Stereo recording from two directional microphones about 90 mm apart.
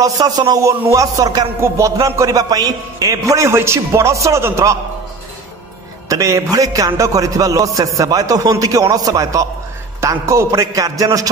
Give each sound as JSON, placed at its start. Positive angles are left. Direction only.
{"t": 0.0, "sound": "a man's voice", "side_deg": -45}
{"t": 1.6, "sound": "a man's voice", "side_deg": -35}
{"t": 6.0, "sound": "a man's voice", "side_deg": -35}